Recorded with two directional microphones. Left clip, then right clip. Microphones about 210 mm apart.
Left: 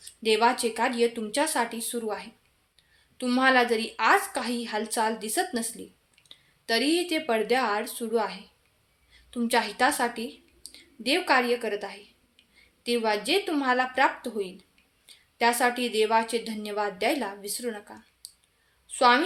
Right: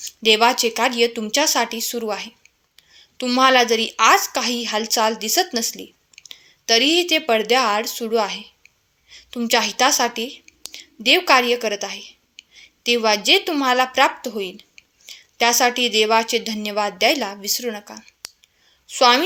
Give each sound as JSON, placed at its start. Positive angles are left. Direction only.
{"t": 0.0, "sound": "speech", "side_deg": -40}
{"t": 9.0, "sound": "a sound", "side_deg": -35}
{"t": 10.0, "sound": "speech", "side_deg": -40}